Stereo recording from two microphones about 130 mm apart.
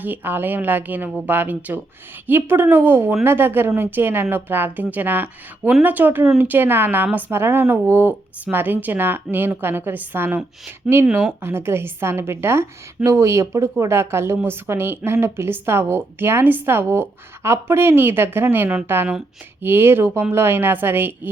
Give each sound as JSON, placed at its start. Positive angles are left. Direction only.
{"t": 0.0, "sound": "a woman's voice", "side_deg": -15}